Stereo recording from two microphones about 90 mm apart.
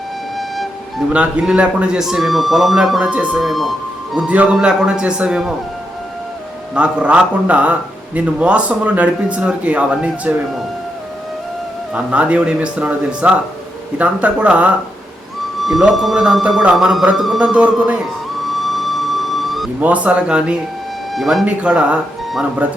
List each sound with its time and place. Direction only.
0.3 s music: centre (ahead or behind)
1.1 s a man's voice: 10° right (ahead or behind)
3.0 s speech: 15° right (ahead or behind)
3.4 s speech: centre (ahead or behind)
4.3 s speech: 15° right (ahead or behind)
6.7 s speech: 10° right (ahead or behind)
11.9 s speech: 15° right (ahead or behind)
15.6 s a man's voice: centre (ahead or behind)
18.5 s music: centre (ahead or behind)
19.8 s speech: 15° right (ahead or behind)
21.1 s speech: centre (ahead or behind)
21.4 s speech: 15° right (ahead or behind)